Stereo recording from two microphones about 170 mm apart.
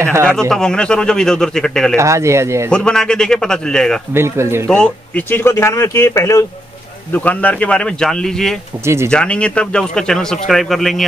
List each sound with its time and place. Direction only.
0.0 s speech: 15° right (ahead or behind)
0.5 s speech: 5° left (ahead or behind)
2.0 s speech: 15° right (ahead or behind)
2.7 s speech: 5° left (ahead or behind)
4.1 s speech: 15° right (ahead or behind)
4.6 s speech: 5° left (ahead or behind)
8.8 s speech: 15° right (ahead or behind)
9.1 s speech: 5° left (ahead or behind)